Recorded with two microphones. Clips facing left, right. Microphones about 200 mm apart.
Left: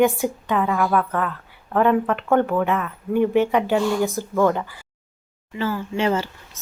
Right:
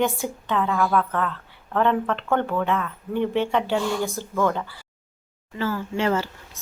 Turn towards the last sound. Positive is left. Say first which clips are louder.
# left 2 dB
turn(degrees=20)  # may be behind; listen again after turning